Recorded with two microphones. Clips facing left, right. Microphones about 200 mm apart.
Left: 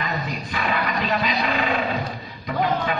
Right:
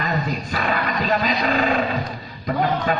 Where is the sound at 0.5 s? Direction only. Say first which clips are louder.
Left 2 dB; 40° right (ahead or behind).